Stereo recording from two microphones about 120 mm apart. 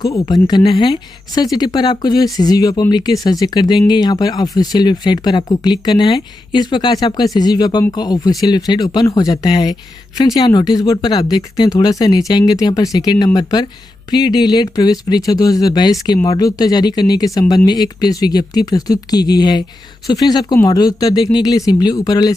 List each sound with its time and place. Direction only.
0.0 s speech: 35° left (ahead or behind)